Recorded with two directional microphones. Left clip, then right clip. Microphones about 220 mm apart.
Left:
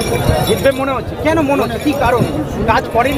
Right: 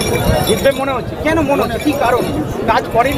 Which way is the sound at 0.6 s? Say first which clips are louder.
Even; 15° left (ahead or behind).